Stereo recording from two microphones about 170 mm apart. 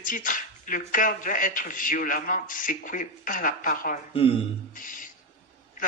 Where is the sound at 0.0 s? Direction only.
50° left (ahead or behind).